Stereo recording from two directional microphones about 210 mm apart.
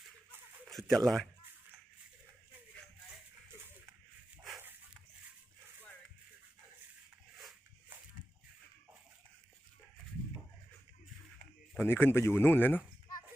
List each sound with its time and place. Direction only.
0.7 s speech: centre (ahead or behind)
7.3 s a sound: centre (ahead or behind)
11.9 s speech: 10° left (ahead or behind)